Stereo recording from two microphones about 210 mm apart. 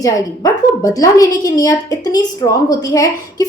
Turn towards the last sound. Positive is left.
turn(degrees=15)  # may be behind; listen again after turning